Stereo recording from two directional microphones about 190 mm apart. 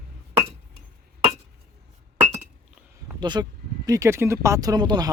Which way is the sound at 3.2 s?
25° right (ahead or behind).